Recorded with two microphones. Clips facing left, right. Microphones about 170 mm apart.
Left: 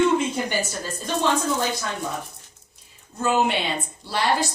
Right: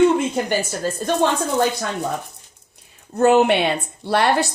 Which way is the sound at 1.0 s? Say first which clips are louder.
Right 7 dB; 50° right (ahead or behind).